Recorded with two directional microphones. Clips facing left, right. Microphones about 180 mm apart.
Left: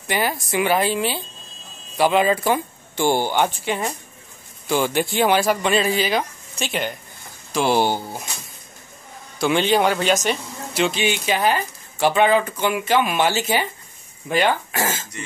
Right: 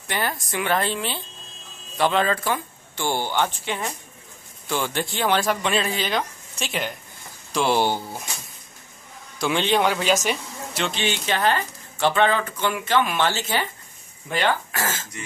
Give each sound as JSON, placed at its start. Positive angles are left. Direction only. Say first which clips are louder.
{"t": 0.1, "sound": "speech", "louder": "left 5 dB", "side_deg": 10}
{"t": 9.4, "sound": "speech", "louder": "left 3 dB", "side_deg": 0}